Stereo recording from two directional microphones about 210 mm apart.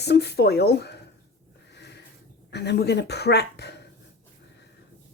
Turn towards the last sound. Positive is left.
turn(degrees=55)  # may be behind; listen again after turning